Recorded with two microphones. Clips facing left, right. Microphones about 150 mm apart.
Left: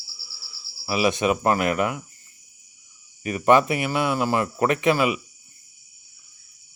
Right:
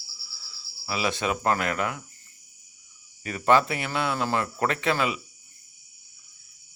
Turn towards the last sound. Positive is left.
turn(degrees=15)  # may be behind; listen again after turning